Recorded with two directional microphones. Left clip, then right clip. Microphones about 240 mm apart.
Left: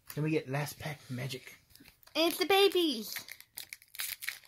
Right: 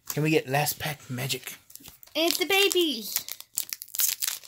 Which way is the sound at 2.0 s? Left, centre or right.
Centre.